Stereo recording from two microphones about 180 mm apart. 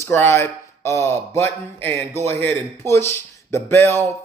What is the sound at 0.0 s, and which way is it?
Speech, 15° left (ahead or behind).